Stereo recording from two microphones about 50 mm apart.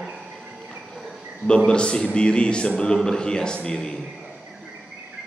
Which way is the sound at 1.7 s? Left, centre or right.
Centre.